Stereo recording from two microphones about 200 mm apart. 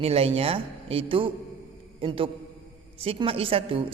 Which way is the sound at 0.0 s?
30° right (ahead or behind).